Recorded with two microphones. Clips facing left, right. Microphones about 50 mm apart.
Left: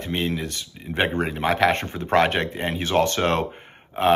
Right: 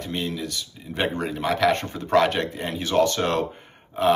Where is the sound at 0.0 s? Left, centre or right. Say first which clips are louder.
Left 3 dB; left.